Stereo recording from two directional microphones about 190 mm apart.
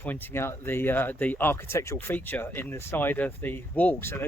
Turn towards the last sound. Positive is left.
turn(degrees=10)  # may be behind; listen again after turning